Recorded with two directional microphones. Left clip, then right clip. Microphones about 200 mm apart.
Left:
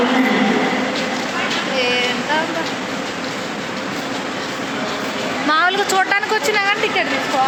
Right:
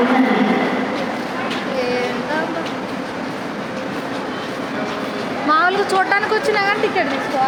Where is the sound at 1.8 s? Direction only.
Centre (ahead or behind).